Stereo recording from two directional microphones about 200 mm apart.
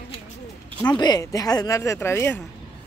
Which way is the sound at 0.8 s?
20° left (ahead or behind).